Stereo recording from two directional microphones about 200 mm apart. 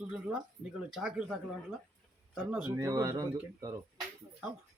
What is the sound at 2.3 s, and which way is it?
Speech, 5° right (ahead or behind).